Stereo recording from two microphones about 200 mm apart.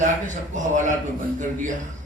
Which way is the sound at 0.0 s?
40° right (ahead or behind).